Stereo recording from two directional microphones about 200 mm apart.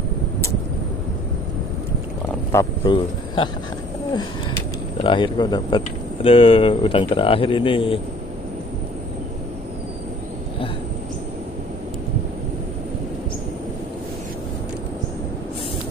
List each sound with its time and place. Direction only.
2.5 s a man's voice: 20° left (ahead or behind)
5.0 s speech: 25° left (ahead or behind)